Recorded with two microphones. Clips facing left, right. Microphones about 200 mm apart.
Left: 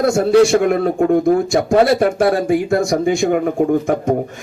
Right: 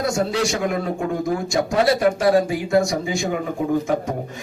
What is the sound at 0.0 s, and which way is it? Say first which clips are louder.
A man's voice: left 10 dB; 55° left (ahead or behind).